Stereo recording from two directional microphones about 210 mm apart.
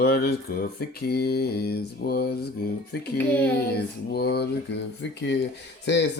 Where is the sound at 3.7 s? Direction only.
50° left (ahead or behind).